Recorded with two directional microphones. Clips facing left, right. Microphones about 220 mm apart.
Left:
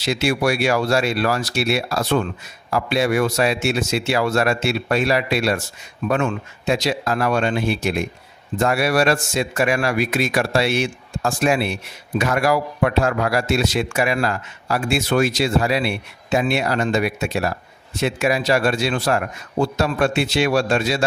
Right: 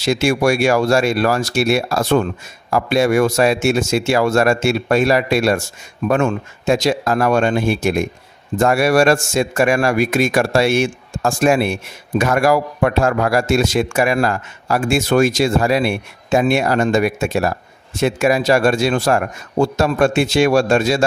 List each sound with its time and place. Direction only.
0.0 s speech: 45° right (ahead or behind)